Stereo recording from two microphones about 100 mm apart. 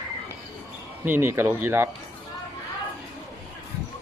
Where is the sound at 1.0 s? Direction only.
25° right (ahead or behind).